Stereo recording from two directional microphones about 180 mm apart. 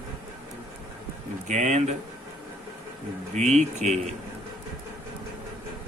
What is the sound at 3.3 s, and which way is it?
Speech, 40° right (ahead or behind).